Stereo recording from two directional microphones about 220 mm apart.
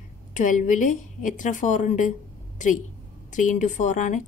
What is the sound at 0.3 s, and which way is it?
A woman's voice, 35° left (ahead or behind).